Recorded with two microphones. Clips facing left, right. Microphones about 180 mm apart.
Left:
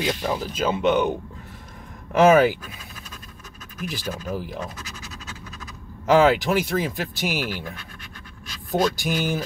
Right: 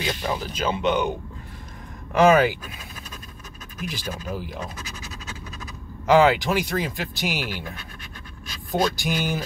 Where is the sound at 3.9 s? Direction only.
Centre (ahead or behind).